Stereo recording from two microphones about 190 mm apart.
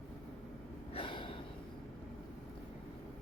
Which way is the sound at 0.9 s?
25° left (ahead or behind).